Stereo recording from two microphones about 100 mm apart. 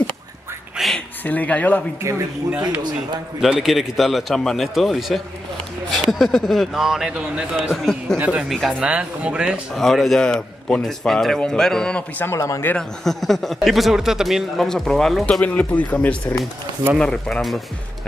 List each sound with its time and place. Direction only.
0.7 s a sound: centre (ahead or behind)
1.2 s speech: 15° left (ahead or behind)
2.0 s speech: 30° right (ahead or behind)
3.3 s a man's voice: 5° right (ahead or behind)
7.5 s a man's voice: centre (ahead or behind)
8.8 s speech: 10° right (ahead or behind)
9.8 s a man's voice: centre (ahead or behind)
12.3 s speech: 30° left (ahead or behind)
12.7 s a man's voice: 5° left (ahead or behind)
15.4 s a man's voice: 15° left (ahead or behind)